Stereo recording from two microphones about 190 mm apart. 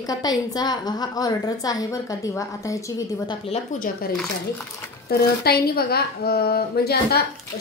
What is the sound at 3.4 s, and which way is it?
Speech, 35° left (ahead or behind).